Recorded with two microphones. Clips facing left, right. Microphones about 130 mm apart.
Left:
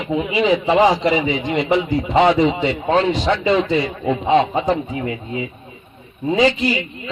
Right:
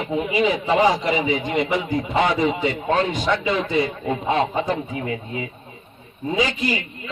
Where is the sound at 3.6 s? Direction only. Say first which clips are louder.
Left 3 dB; 45° right (ahead or behind).